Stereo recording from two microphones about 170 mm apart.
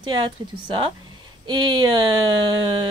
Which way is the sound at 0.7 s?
30° right (ahead or behind).